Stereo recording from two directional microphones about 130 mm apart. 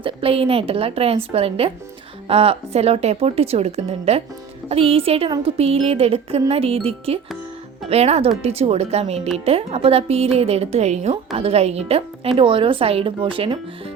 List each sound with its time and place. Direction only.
0.0 s a woman's voice: 45° right (ahead or behind)